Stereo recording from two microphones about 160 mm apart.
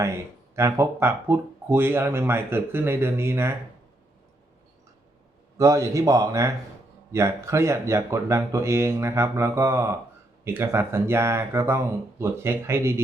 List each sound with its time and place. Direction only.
0.0 s speech: 15° right (ahead or behind)
5.5 s a man's voice: 20° right (ahead or behind)